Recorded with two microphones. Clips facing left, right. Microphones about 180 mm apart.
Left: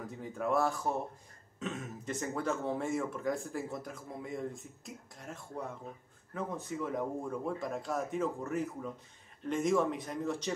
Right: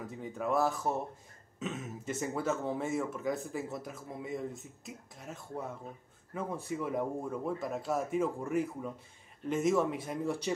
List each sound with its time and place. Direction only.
0.0 s speech: centre (ahead or behind)